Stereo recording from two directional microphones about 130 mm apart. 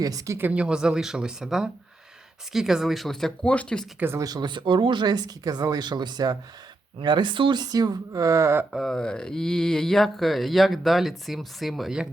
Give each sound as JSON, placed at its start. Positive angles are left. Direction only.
{"t": 0.0, "sound": "speech", "side_deg": -25}
{"t": 4.0, "sound": "speech", "side_deg": -20}
{"t": 4.3, "sound": "speech", "side_deg": -35}
{"t": 8.7, "sound": "speech", "side_deg": 0}